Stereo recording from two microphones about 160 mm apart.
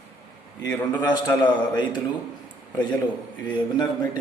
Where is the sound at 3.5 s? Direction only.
25° left (ahead or behind).